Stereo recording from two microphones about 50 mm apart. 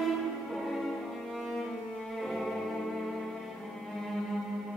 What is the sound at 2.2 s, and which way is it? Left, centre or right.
Music, centre.